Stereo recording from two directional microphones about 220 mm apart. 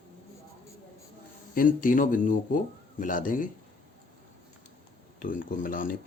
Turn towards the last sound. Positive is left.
turn(degrees=40)  # may be behind; listen again after turning